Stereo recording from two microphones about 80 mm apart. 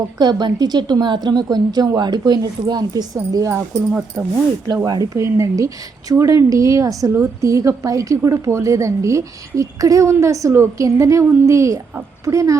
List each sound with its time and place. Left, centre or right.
0.2 s a woman's voice: right
3.2 s speech: right
4.9 s speech: right
5.1 s a woman's voice: right